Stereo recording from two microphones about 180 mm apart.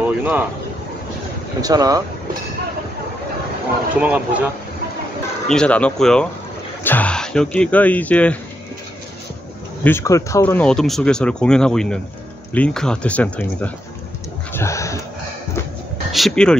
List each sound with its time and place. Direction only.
0.0 s speech: 10° right (ahead or behind)
1.6 s speech: 20° right (ahead or behind)
3.9 s speech: 10° right (ahead or behind)
5.5 s speech: 5° left (ahead or behind)
9.8 s speech: 15° left (ahead or behind)
14.5 s a sound: 15° left (ahead or behind)
16.1 s speech: centre (ahead or behind)